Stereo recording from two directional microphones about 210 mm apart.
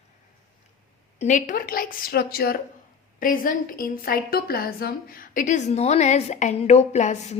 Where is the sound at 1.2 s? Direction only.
35° left (ahead or behind).